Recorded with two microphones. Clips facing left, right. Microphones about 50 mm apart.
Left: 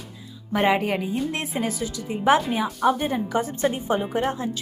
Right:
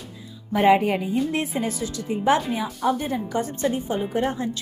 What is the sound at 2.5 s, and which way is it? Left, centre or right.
Speech, left.